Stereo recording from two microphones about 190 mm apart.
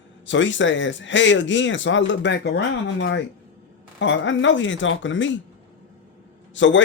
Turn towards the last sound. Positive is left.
turn(degrees=80)